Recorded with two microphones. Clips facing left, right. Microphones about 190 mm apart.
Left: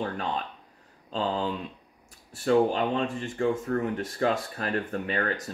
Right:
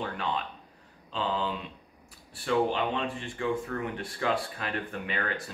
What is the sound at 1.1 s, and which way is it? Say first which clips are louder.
Speech: left 3 dB; 45° left (ahead or behind).